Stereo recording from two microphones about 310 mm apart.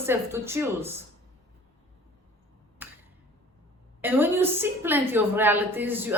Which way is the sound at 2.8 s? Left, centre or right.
Centre.